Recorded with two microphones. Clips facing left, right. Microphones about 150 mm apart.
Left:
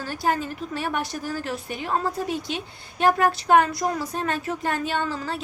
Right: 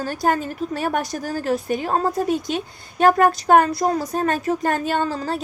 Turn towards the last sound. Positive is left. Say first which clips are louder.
# right 5 dB
turn(degrees=-40)  # may be behind; listen again after turning